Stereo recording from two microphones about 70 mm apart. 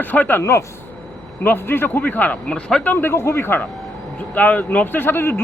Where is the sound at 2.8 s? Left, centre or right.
Left.